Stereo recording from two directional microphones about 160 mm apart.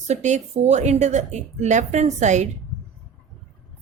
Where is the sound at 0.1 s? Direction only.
45° right (ahead or behind).